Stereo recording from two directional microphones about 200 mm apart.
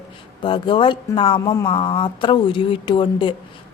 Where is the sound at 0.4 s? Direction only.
25° left (ahead or behind).